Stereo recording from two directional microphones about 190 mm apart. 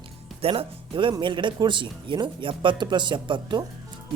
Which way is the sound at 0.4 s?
30° right (ahead or behind).